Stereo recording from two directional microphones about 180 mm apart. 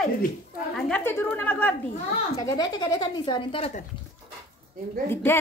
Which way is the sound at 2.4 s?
20° left (ahead or behind).